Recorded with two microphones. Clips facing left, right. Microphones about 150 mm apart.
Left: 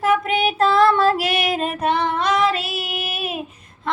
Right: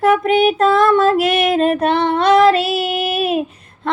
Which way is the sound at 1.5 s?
60° right (ahead or behind).